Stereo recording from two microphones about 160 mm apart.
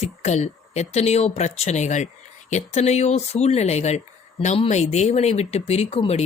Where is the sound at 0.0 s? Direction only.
45° left (ahead or behind).